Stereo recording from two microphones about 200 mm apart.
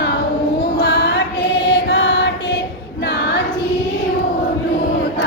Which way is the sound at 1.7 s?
65° left (ahead or behind).